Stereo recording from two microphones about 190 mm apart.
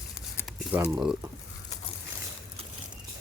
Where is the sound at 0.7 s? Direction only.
5° right (ahead or behind).